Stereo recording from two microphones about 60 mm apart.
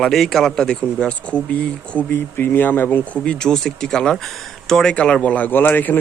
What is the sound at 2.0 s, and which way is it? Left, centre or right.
Speech, left.